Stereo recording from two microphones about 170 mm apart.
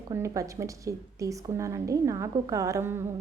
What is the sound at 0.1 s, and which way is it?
A woman's voice, 20° right (ahead or behind).